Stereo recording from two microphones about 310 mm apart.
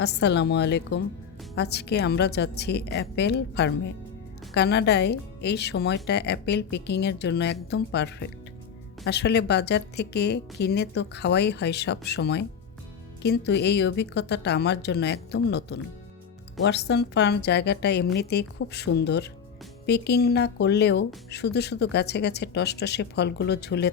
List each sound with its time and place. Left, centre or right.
0.0 s speech: left